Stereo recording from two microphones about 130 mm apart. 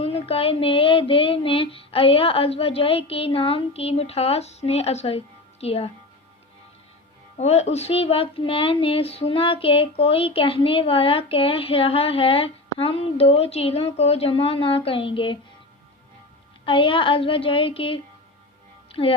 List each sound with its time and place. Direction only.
0.0 s speech: 50° left (ahead or behind)
7.3 s speech: 55° left (ahead or behind); by 15.4 s 40° left (ahead or behind)
16.6 s speech: 40° left (ahead or behind)
18.9 s music: 45° left (ahead or behind)